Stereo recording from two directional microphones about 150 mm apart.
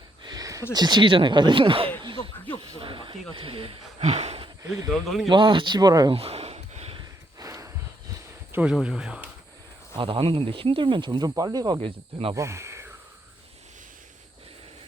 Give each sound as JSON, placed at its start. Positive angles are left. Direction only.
{"t": 0.3, "sound": "a sound", "side_deg": -25}
{"t": 0.7, "sound": "speech", "side_deg": -30}
{"t": 2.2, "sound": "snake", "side_deg": 15}
{"t": 2.6, "sound": "speech", "side_deg": -35}
{"t": 4.9, "sound": "speech", "side_deg": 0}
{"t": 5.3, "sound": "speech", "side_deg": -35}
{"t": 6.1, "sound": "a sound", "side_deg": -40}
{"t": 7.0, "sound": "a sound", "side_deg": -20}
{"t": 8.5, "sound": "speech", "side_deg": -5}
{"t": 9.9, "sound": "speech", "side_deg": -35}
{"t": 12.3, "sound": "speech", "side_deg": -20}